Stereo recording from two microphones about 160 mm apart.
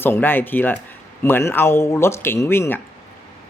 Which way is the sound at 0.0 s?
15° left (ahead or behind).